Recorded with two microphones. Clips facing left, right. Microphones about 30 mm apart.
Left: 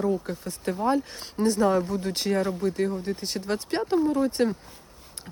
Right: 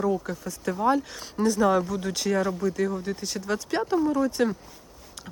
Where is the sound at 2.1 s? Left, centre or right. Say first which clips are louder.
Right 1 dB; left.